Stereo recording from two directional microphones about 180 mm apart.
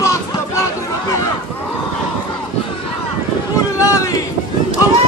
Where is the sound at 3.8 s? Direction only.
15° left (ahead or behind).